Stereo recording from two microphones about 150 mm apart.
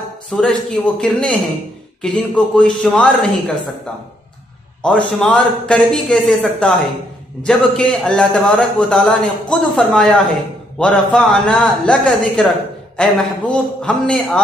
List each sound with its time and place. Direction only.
0.3 s a man's voice: 5° left (ahead or behind)
4.8 s a man's voice: 10° left (ahead or behind)
7.4 s a man's voice: 5° left (ahead or behind)